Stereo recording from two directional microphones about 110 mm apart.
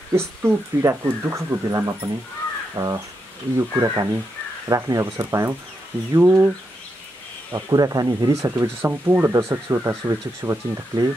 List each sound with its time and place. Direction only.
0.1 s speech: 25° right (ahead or behind)
2.7 s crow: 35° right (ahead or behind)
3.5 s speech: 30° right (ahead or behind)
7.5 s speech: 35° right (ahead or behind)